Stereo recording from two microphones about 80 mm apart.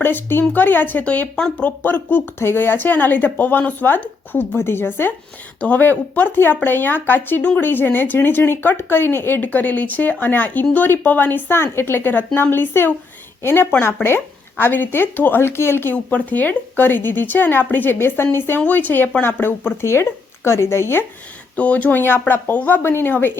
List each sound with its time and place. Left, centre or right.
0.0 s speech: left
21.5 s speech: centre